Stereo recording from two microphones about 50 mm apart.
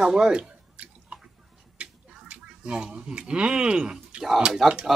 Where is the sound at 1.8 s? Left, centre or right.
Right.